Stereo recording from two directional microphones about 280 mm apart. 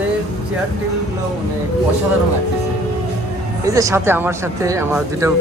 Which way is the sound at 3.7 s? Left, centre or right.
Centre.